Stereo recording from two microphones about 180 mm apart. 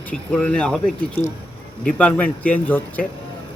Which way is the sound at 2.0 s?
5° left (ahead or behind).